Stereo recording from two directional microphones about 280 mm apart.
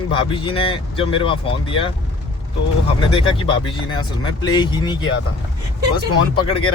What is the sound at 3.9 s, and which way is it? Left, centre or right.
Speech, centre.